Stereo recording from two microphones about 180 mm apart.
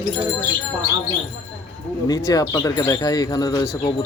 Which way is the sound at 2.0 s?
20° left (ahead or behind).